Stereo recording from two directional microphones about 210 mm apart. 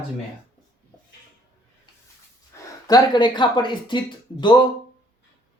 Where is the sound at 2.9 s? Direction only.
20° left (ahead or behind).